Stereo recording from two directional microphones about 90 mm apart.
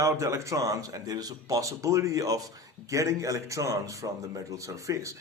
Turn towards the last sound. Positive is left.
turn(degrees=-35)  # may be behind; listen again after turning